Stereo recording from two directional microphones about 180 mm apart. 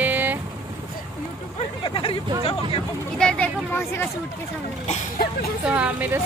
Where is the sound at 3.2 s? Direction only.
5° left (ahead or behind).